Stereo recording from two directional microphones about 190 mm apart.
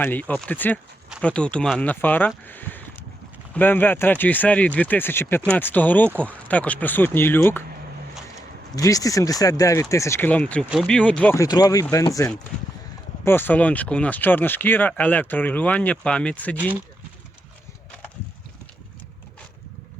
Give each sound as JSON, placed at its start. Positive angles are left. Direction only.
{"t": 0.0, "sound": "speech", "side_deg": 10}
{"t": 2.5, "sound": "a sound", "side_deg": 10}
{"t": 3.5, "sound": "speech", "side_deg": 10}
{"t": 8.7, "sound": "speech", "side_deg": 20}
{"t": 11.4, "sound": "speech", "side_deg": 20}
{"t": 13.2, "sound": "speech", "side_deg": 10}